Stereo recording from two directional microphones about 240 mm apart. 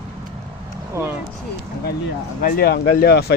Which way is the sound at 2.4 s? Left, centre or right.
Left.